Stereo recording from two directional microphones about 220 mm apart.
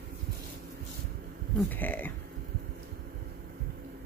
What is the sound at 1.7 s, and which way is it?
Speech, 10° left (ahead or behind).